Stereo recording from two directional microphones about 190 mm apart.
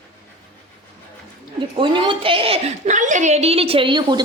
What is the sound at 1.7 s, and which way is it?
A woman's voice, 25° right (ahead or behind).